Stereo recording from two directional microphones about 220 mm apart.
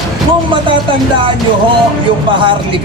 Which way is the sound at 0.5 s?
20° right (ahead or behind).